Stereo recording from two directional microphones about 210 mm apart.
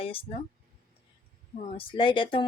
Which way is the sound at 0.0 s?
25° left (ahead or behind).